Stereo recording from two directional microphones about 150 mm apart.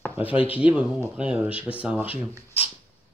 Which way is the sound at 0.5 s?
10° right (ahead or behind).